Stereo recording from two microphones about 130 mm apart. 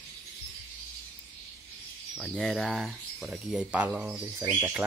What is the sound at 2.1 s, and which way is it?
Speech, 5° left (ahead or behind).